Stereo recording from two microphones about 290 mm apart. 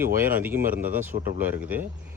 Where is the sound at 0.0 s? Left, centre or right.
Right.